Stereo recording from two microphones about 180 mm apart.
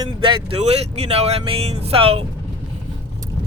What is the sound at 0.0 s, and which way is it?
Speech, 30° right (ahead or behind).